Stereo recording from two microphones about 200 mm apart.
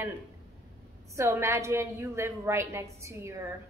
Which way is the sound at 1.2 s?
15° right (ahead or behind).